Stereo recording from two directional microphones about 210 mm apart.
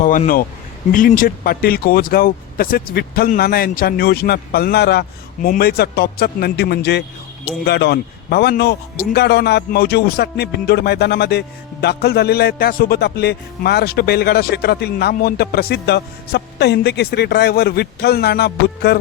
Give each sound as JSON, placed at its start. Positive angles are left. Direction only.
{"t": 0.0, "sound": "a man's voice", "side_deg": 40}